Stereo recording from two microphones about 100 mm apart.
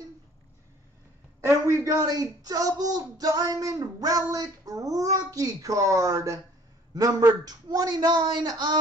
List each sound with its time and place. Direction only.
1.4 s a man's voice: 30° right (ahead or behind); by 8.7 s 45° right (ahead or behind)